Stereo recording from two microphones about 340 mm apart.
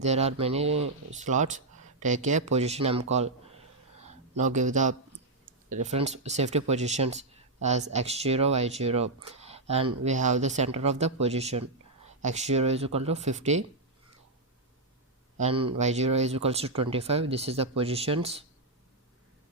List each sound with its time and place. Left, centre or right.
0.0 s speech: centre
5.6 s speech: right
5.9 s speech: centre
15.4 s speech: centre